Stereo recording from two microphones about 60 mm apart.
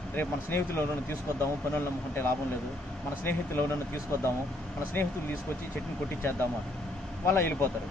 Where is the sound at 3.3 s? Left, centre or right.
Left.